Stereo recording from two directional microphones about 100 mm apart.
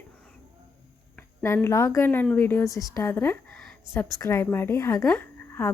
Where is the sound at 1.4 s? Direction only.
25° left (ahead or behind).